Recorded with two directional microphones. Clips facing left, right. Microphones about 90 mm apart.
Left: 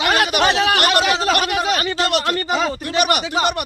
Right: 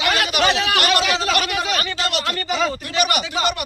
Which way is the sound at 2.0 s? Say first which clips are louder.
Left 4 dB; 50° left (ahead or behind).